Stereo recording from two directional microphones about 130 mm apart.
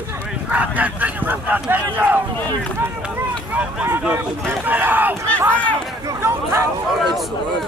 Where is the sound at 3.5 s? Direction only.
10° right (ahead or behind).